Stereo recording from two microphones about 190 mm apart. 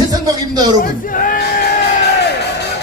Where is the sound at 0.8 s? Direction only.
45° left (ahead or behind).